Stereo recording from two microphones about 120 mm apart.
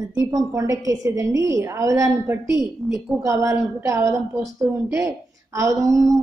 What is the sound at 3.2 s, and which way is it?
A woman's voice, 25° right (ahead or behind).